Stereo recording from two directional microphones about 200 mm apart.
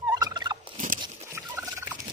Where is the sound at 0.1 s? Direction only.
20° right (ahead or behind).